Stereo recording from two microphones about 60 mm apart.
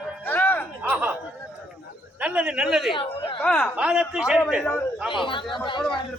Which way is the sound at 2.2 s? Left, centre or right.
Centre.